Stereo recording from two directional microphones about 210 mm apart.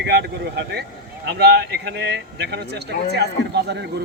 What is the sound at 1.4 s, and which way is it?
A man's voice, 50° right (ahead or behind).